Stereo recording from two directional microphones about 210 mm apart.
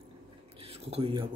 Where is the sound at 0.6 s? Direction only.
30° right (ahead or behind).